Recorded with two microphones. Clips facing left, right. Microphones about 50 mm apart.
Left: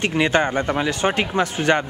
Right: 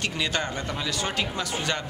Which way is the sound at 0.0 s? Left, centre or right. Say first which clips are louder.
Left 9 dB; left.